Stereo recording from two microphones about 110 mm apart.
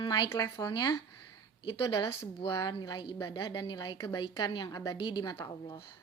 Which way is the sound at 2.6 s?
40° left (ahead or behind).